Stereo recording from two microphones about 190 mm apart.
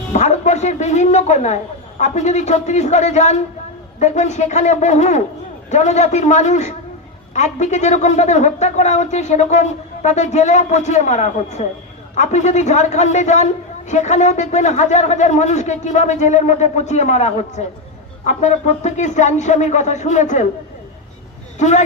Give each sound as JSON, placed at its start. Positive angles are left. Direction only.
{"t": 0.1, "sound": "a man's voice", "side_deg": 35}
{"t": 21.6, "sound": "a man's voice", "side_deg": 40}